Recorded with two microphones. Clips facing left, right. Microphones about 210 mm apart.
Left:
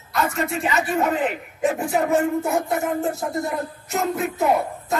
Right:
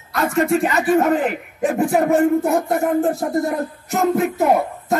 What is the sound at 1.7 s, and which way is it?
Music, 55° right (ahead or behind).